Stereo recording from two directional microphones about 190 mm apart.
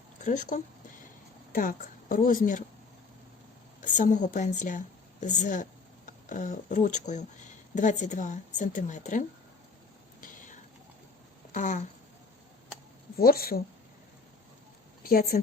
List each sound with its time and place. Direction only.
0.3 s a woman's voice: 40° left (ahead or behind)
3.8 s a woman's voice: 40° left (ahead or behind)
10.2 s whispering: 45° left (ahead or behind)
11.5 s speech: 40° left (ahead or behind)
13.1 s a woman's voice: 50° left (ahead or behind)
15.0 s a woman's voice: 50° left (ahead or behind)